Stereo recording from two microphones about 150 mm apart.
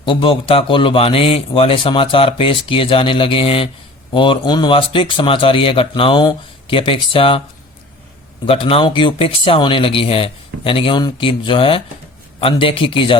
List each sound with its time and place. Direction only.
0.0 s a man's voice: 35° left (ahead or behind)
8.4 s a man's voice: 40° left (ahead or behind)